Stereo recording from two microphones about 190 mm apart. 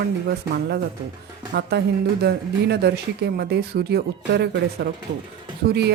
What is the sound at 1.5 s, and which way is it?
Speech, 60° right (ahead or behind).